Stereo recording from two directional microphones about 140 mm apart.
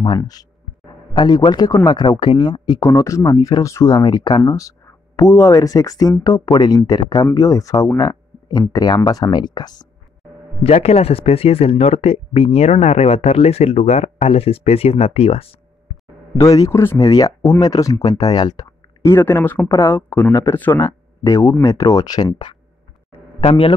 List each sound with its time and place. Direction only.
0.0 s a man's voice: 30° left (ahead or behind)
10.6 s speech: 50° left (ahead or behind)
16.3 s speech: 25° left (ahead or behind)
19.1 s speech: 15° left (ahead or behind); by 22.6 s 30° left (ahead or behind)